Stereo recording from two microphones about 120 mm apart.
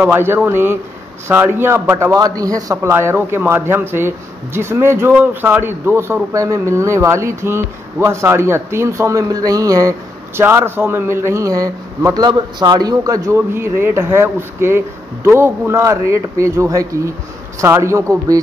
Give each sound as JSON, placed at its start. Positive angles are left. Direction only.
{"t": 0.0, "sound": "a man's voice", "side_deg": -20}